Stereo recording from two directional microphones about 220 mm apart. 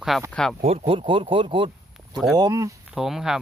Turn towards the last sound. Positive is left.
turn(degrees=0)  # may be behind; listen again after turning